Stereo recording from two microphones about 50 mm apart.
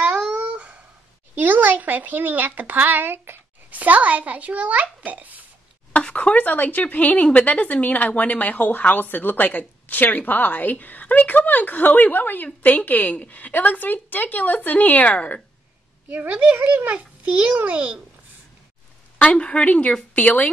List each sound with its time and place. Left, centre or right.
0.0 s a sound: right
1.3 s a child's voice: right
3.8 s a child's voice: right
5.9 s a woman's voice: left
16.1 s a child's voice: right
19.1 s a woman's voice: left